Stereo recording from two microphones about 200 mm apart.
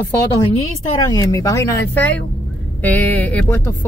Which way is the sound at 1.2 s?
15° left (ahead or behind).